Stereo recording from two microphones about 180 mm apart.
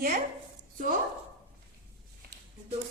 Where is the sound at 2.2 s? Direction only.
55° right (ahead or behind).